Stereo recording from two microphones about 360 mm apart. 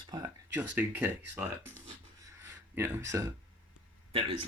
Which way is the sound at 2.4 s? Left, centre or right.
Centre.